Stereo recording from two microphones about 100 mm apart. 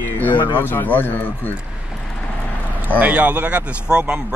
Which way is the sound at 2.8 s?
15° right (ahead or behind).